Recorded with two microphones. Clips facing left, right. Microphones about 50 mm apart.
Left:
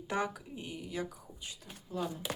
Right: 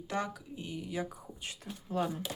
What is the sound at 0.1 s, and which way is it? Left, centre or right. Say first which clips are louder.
Speech: left 1 dB; centre.